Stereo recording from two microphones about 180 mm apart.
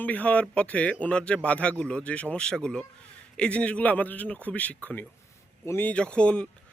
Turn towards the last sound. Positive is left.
turn(degrees=5)  # may be behind; listen again after turning